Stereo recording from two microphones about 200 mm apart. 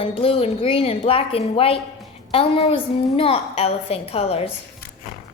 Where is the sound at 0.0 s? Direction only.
30° left (ahead or behind).